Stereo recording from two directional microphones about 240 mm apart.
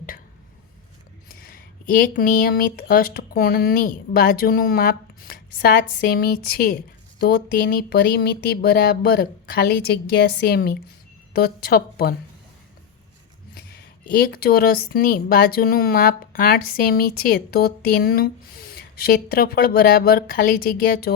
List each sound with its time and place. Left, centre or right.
1.5 s speech: left
14.1 s speech: left